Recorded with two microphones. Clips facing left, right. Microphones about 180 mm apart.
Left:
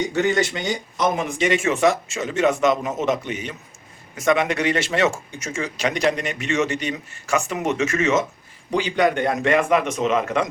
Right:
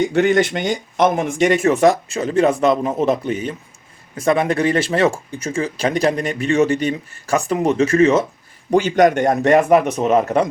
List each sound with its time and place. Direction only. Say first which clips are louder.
0.1 s speech: right 5 dB; 60° right (ahead or behind); by 8.2 s 35° right (ahead or behind)
8.7 s a man's voice: right 6 dB; 45° right (ahead or behind)